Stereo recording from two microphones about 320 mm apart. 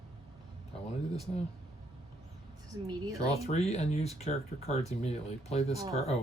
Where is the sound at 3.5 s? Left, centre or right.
Centre.